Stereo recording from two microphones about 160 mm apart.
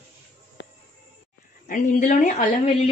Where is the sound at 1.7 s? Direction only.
50° left (ahead or behind).